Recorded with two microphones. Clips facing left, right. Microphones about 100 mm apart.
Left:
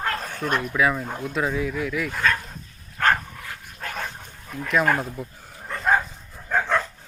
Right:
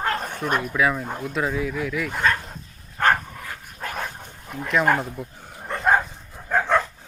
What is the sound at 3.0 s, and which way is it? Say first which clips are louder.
Dog: right 1 dB; 20° right (ahead or behind).